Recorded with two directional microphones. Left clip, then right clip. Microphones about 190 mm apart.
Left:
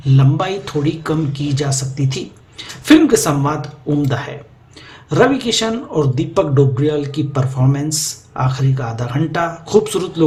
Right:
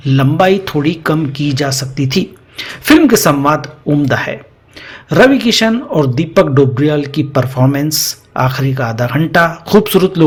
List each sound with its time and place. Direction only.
0.0 s a man's voice: 30° right (ahead or behind)